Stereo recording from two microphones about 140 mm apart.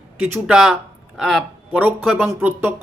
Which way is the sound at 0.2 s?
20° right (ahead or behind).